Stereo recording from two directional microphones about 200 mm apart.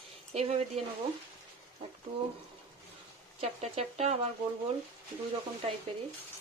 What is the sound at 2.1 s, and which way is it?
Speech, 25° right (ahead or behind).